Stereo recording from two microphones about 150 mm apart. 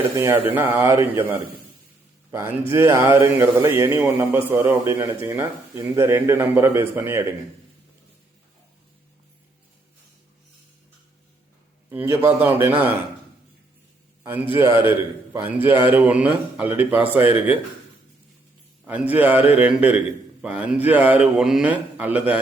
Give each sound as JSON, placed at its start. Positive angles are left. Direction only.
{"t": 0.2, "sound": "speech", "side_deg": -15}
{"t": 11.9, "sound": "speech", "side_deg": -15}
{"t": 14.3, "sound": "speech", "side_deg": -15}
{"t": 18.9, "sound": "speech", "side_deg": -10}